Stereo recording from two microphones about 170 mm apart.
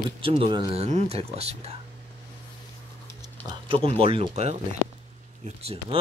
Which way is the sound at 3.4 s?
35° right (ahead or behind).